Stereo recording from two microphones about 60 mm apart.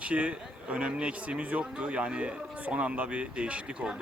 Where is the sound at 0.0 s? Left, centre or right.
Centre.